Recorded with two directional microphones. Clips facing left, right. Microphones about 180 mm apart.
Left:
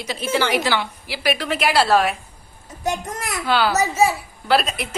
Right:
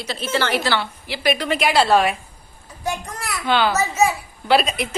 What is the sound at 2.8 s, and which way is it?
Speech, 20° left (ahead or behind).